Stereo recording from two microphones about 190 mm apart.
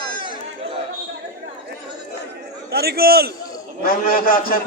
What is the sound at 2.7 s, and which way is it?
Speech, 55° right (ahead or behind).